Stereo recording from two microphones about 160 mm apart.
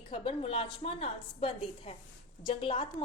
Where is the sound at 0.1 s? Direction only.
35° left (ahead or behind).